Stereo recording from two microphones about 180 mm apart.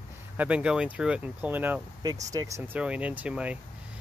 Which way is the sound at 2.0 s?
20° right (ahead or behind).